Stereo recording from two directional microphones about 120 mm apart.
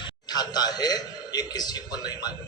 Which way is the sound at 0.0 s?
35° left (ahead or behind).